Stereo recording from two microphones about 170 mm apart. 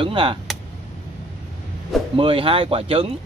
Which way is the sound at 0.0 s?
30° right (ahead or behind).